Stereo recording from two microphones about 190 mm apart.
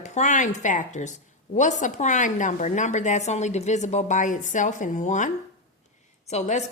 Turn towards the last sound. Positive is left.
turn(degrees=35)  # may be behind; listen again after turning